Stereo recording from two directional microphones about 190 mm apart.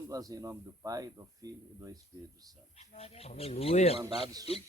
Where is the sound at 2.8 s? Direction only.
30° left (ahead or behind).